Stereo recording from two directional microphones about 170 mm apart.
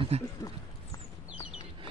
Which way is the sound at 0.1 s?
40° right (ahead or behind).